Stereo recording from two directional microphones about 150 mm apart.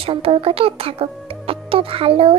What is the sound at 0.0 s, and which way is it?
A child's voice, 40° right (ahead or behind).